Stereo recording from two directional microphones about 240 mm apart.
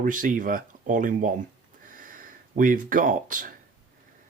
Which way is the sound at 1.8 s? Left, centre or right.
Right.